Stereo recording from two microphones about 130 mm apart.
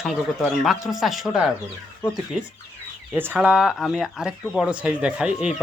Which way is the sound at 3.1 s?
15° right (ahead or behind).